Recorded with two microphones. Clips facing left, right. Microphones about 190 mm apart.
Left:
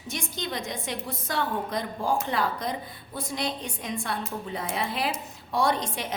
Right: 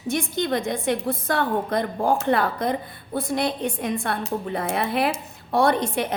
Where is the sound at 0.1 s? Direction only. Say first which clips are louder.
Right 9 dB; 55° right (ahead or behind).